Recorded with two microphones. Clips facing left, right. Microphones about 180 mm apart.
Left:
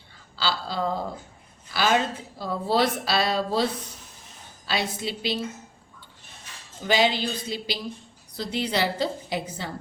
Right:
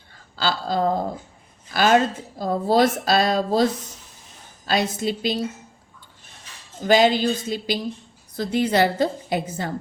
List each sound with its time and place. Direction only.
0.3 s a woman's voice: 45° right (ahead or behind)
6.8 s a woman's voice: 45° right (ahead or behind)